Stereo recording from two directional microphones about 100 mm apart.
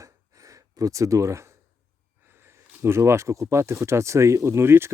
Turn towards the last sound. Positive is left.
turn(degrees=-25)  # may be behind; listen again after turning